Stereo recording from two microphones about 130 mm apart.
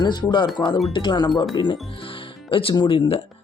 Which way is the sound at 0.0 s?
35° left (ahead or behind).